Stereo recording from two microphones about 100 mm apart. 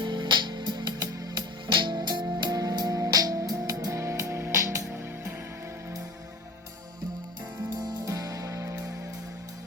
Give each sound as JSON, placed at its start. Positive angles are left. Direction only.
{"t": 0.0, "sound": "music", "side_deg": -50}
{"t": 7.9, "sound": "music", "side_deg": -35}